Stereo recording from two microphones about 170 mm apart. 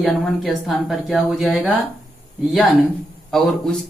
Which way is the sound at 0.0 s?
Centre (ahead or behind).